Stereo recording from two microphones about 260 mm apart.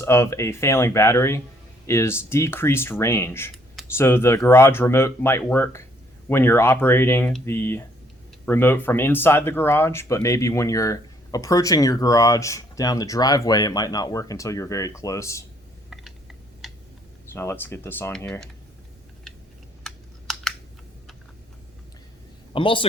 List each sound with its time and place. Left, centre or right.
0.0 s speech: centre
16.6 s a sound: centre
17.3 s speech: centre
19.8 s computer keyboard: centre
22.5 s a man's voice: centre